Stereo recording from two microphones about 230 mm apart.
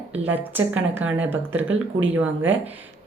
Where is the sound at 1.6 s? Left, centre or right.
Right.